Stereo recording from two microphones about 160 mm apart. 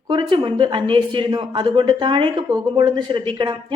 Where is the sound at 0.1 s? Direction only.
30° right (ahead or behind).